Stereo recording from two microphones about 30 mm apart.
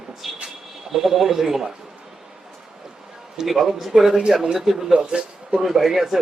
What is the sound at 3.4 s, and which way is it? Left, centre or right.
Speech, centre.